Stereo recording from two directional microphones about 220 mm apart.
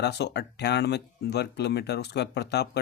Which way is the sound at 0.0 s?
50° left (ahead or behind).